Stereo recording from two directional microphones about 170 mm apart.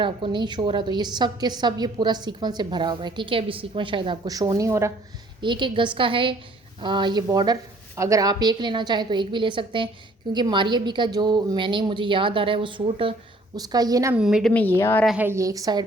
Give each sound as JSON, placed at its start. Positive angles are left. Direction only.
{"t": 0.0, "sound": "a woman's voice", "side_deg": -30}
{"t": 5.4, "sound": "a woman's voice", "side_deg": -30}
{"t": 14.2, "sound": "a woman's voice", "side_deg": -5}
{"t": 14.5, "sound": "a woman's voice", "side_deg": 10}
{"t": 15.0, "sound": "a woman's voice", "side_deg": -5}
{"t": 15.3, "sound": "a woman's voice", "side_deg": -20}